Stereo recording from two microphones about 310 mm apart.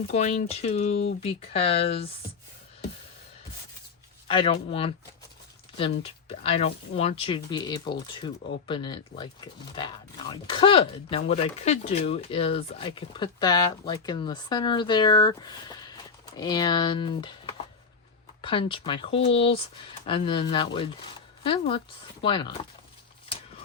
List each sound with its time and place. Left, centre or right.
0.1 s speech: left
4.3 s speech: centre